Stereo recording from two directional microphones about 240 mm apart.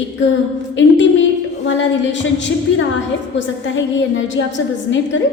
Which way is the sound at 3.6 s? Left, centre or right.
Left.